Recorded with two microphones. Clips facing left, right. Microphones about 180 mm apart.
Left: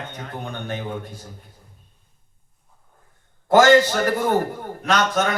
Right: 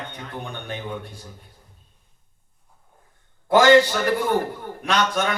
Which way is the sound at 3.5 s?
45° left (ahead or behind).